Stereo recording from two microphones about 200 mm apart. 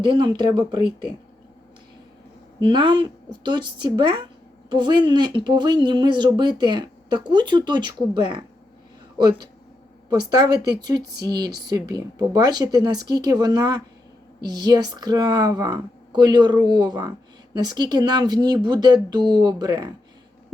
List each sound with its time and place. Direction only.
0.0 s speech: 25° right (ahead or behind)
2.6 s speech: 25° right (ahead or behind)
10.1 s speech: 20° right (ahead or behind)